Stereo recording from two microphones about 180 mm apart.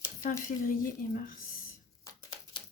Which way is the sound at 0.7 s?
50° left (ahead or behind).